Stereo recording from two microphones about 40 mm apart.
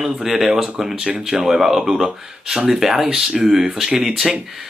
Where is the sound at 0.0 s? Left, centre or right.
Centre.